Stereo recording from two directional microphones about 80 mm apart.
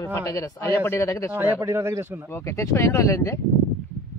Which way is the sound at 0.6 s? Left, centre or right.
Left.